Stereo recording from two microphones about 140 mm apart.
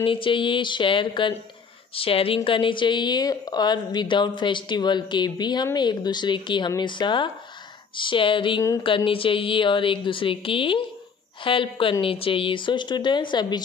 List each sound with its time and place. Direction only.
0.0 s a woman's voice: 40° left (ahead or behind)